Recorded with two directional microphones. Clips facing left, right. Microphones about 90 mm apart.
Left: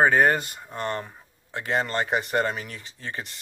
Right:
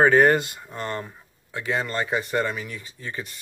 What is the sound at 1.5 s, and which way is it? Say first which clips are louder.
A man's voice: left 1 dB; 35° left (ahead or behind).